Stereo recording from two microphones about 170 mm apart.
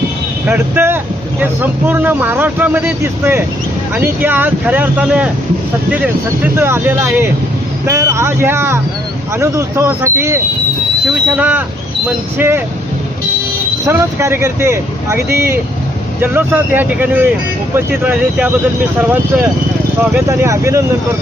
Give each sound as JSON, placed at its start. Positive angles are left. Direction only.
{"t": 0.4, "sound": "speech", "side_deg": -10}
{"t": 13.8, "sound": "speech", "side_deg": -15}